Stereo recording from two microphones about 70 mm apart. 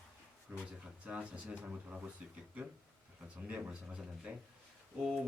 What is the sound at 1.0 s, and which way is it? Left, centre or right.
Speech, centre.